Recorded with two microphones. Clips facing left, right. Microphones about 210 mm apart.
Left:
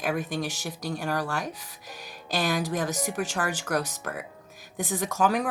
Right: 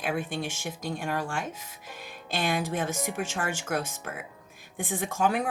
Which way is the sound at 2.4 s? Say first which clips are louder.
Left 1 dB; 40° left (ahead or behind).